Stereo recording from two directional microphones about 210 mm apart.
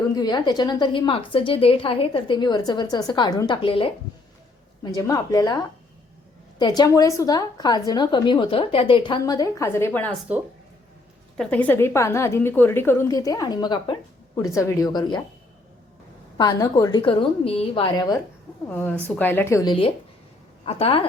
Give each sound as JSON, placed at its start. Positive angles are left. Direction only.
{"t": 0.1, "sound": "a woman's voice", "side_deg": 20}
{"t": 4.9, "sound": "a woman's voice", "side_deg": 15}
{"t": 11.3, "sound": "a woman's voice", "side_deg": 5}
{"t": 16.4, "sound": "a woman's voice", "side_deg": 20}
{"t": 18.7, "sound": "a woman's voice", "side_deg": 10}